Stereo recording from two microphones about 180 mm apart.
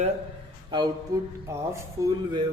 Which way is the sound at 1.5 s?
15° right (ahead or behind).